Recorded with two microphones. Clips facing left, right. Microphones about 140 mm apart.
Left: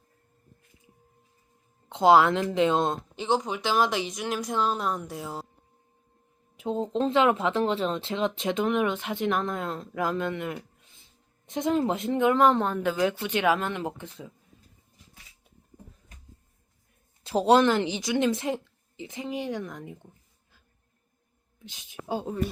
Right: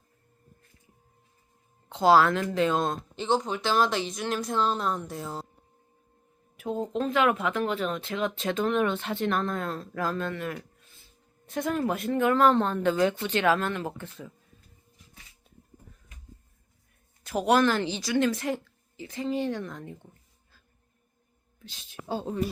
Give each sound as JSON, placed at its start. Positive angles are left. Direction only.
{"t": 1.9, "sound": "speech", "side_deg": 20}
{"t": 6.6, "sound": "speech", "side_deg": 25}
{"t": 17.2, "sound": "speech", "side_deg": 25}
{"t": 21.6, "sound": "speech", "side_deg": 15}